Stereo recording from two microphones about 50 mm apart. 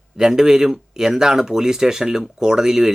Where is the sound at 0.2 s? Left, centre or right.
Centre.